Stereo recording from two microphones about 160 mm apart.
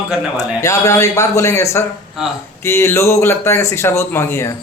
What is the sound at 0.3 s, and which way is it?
A man's voice, 20° left (ahead or behind).